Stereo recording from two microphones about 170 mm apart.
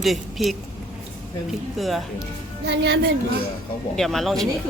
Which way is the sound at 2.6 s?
85° right.